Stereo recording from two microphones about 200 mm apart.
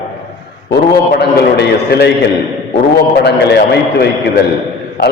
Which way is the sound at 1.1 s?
55° left (ahead or behind).